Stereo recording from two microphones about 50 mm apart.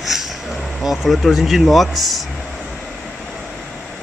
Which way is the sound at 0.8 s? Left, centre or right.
Centre.